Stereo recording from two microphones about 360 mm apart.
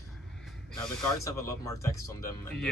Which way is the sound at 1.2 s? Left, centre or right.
Centre.